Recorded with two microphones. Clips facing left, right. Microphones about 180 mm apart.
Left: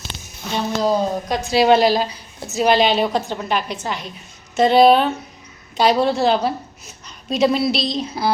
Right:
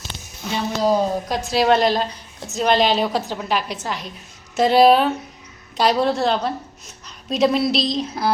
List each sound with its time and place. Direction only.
0.8 s a woman's voice: 5° right (ahead or behind)